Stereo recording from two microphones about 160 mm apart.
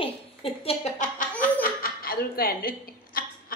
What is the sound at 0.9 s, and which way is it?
Speech, 50° left (ahead or behind).